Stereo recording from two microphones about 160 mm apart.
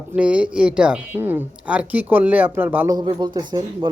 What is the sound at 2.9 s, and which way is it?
Speech, 25° right (ahead or behind).